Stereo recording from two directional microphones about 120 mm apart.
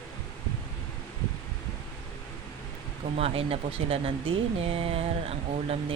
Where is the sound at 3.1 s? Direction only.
55° right (ahead or behind).